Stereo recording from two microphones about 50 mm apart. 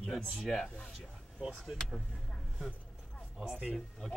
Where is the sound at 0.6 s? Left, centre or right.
Centre.